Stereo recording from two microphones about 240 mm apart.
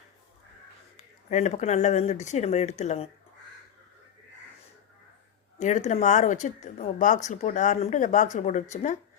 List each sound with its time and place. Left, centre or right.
0.9 s speech: left
5.5 s speech: left